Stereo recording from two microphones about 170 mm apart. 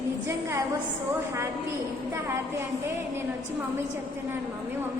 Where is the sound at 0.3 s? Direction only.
15° right (ahead or behind).